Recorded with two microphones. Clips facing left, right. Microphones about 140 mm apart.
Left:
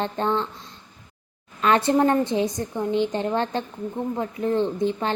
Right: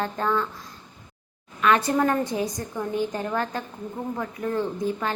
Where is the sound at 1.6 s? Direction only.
30° left (ahead or behind).